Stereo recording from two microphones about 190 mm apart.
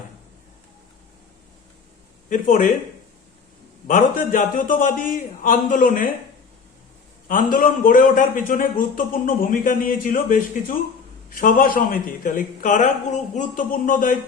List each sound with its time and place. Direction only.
2.3 s a man's voice: 45° left (ahead or behind)
3.8 s a man's voice: 45° left (ahead or behind)
7.3 s a man's voice: 45° left (ahead or behind)